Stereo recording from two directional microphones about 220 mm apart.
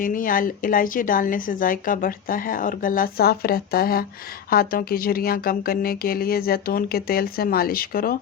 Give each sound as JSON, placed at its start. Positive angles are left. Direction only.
{"t": 0.0, "sound": "speech", "side_deg": 40}